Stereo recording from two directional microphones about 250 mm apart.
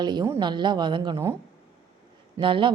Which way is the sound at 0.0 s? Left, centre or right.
Centre.